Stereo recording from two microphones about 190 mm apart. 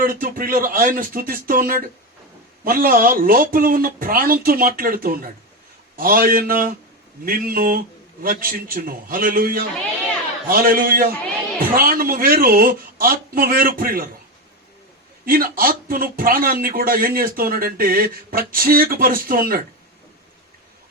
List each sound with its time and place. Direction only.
0.0 s speech: 45° right (ahead or behind)
15.2 s speech: 50° right (ahead or behind)